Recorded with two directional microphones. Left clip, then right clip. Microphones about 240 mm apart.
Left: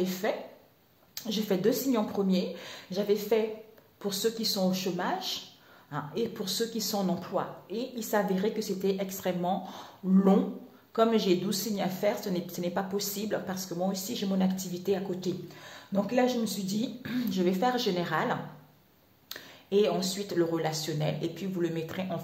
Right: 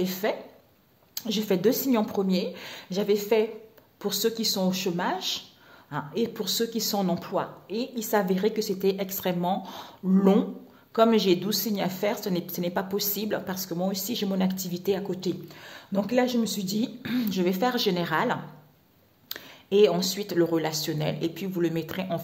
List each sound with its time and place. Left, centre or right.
0.0 s a woman's voice: right